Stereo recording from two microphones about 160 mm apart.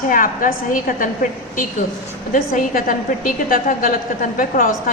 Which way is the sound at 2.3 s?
60° left (ahead or behind).